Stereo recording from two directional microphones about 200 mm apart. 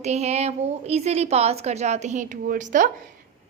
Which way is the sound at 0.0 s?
35° right (ahead or behind).